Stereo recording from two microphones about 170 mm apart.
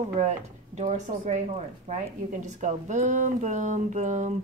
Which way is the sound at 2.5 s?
45° right (ahead or behind).